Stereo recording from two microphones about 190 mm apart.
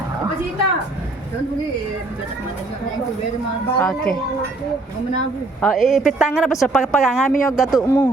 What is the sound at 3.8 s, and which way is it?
Speech, 5° left (ahead or behind).